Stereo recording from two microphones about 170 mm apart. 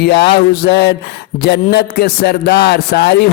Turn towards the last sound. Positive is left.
turn(degrees=75)  # may be behind; listen again after turning